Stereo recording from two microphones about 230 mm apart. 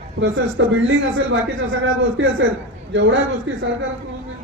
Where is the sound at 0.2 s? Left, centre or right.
Right.